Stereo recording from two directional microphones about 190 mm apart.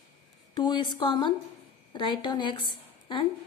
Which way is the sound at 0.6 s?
25° left (ahead or behind).